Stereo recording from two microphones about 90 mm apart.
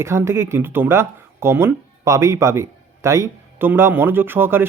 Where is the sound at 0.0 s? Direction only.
30° right (ahead or behind).